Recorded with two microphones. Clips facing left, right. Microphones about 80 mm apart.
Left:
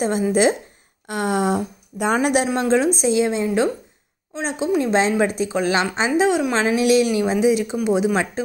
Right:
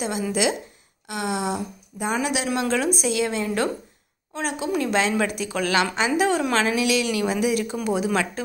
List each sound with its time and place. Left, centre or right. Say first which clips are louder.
0.3 s speech: left 6 dB; left
1.0 s a sound: left 5 dB; left
2.1 s speech: left 5 dB; left
2.6 s a woman's voice: left 5 dB; left
6.2 s a woman's voice: left 3 dB; centre
6.8 s speech: left 6 dB; left
7.1 s a woman's voice: left 5 dB; left